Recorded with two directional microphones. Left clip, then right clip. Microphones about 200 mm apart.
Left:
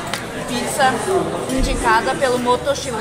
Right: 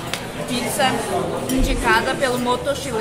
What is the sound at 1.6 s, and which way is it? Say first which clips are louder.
A woman's voice: left 2 dB; 5° right (ahead or behind).